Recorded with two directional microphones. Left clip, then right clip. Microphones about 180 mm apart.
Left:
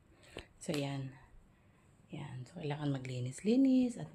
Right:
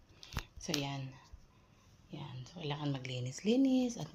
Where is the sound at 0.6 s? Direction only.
35° left (ahead or behind).